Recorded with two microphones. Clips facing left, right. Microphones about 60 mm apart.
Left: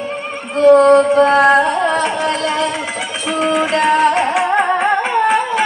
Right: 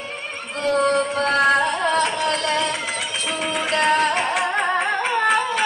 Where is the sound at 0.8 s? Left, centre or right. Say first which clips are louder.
Left 10 dB; centre.